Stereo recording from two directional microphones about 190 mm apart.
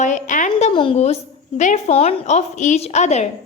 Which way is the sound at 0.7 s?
30° left (ahead or behind).